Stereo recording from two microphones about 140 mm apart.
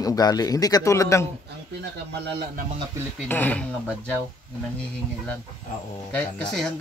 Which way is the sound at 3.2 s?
15° left (ahead or behind).